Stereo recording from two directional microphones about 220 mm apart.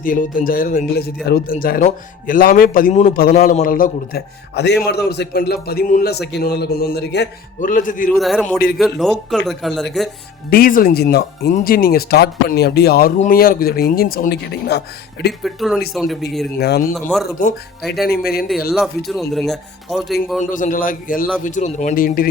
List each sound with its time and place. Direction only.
0.0 s speech: 40° left (ahead or behind)
8.1 s speech: centre (ahead or behind)
10.5 s speech: 40° left (ahead or behind)
15.3 s speech: centre (ahead or behind)
16.6 s speech: 45° left (ahead or behind)
16.9 s speech: centre (ahead or behind)
17.2 s speech: 40° left (ahead or behind)
18.7 s speech: centre (ahead or behind)
20.4 s speech: 35° left (ahead or behind)